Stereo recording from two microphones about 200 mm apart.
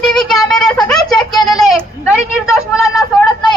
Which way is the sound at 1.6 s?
Centre (ahead or behind).